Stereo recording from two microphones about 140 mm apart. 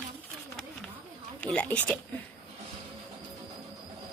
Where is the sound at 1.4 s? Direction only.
10° left (ahead or behind).